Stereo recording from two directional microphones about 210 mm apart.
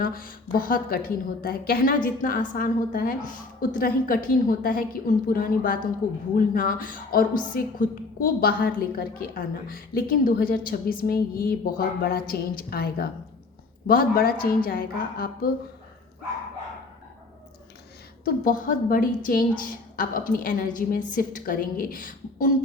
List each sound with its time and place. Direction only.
0.0 s a woman's voice: 45° left (ahead or behind)
18.3 s a woman's voice: 40° left (ahead or behind)